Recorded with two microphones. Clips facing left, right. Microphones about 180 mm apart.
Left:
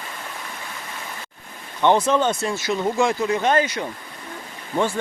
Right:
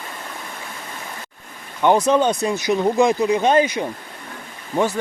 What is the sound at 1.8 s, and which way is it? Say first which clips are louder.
Speech: right 2 dB; 10° right (ahead or behind).